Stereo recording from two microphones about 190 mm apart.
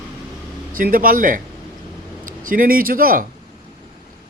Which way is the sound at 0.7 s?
50° right (ahead or behind).